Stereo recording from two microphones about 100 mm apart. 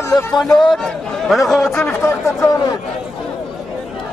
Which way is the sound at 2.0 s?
30° left (ahead or behind).